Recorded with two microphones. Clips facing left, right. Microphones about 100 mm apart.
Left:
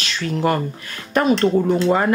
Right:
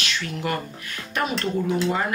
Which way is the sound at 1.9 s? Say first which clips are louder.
Left 8 dB; 50° left (ahead or behind).